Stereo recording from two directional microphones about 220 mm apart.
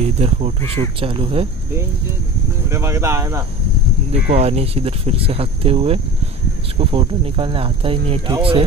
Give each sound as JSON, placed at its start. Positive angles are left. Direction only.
{"t": 0.2, "sound": "speech", "side_deg": -30}
{"t": 2.7, "sound": "speech", "side_deg": -15}
{"t": 4.3, "sound": "speech", "side_deg": -30}